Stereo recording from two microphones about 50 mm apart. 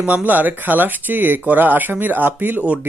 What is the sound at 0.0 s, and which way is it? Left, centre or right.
Speech, right.